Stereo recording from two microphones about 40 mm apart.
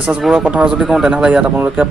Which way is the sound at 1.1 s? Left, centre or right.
Right.